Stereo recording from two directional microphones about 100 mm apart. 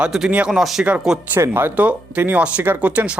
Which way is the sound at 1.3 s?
20° right (ahead or behind).